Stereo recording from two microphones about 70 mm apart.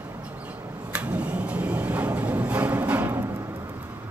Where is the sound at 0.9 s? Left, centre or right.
Centre.